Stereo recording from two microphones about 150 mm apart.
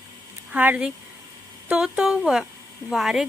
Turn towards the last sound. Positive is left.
turn(degrees=-5)  # may be behind; listen again after turning